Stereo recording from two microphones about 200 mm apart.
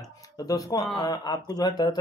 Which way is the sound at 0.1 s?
20° left (ahead or behind).